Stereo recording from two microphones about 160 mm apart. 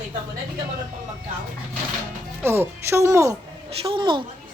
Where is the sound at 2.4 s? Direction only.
15° right (ahead or behind).